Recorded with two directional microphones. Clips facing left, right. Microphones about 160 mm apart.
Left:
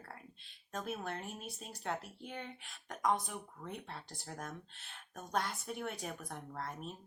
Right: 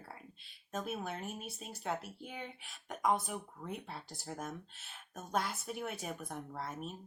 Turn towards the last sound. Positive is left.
turn(degrees=-5)  # may be behind; listen again after turning